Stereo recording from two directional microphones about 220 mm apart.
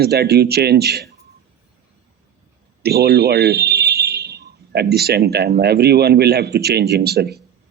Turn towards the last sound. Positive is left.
turn(degrees=-45)  # may be behind; listen again after turning